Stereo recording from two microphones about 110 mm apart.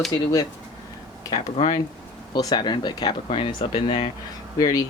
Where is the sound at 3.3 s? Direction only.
55° left (ahead or behind).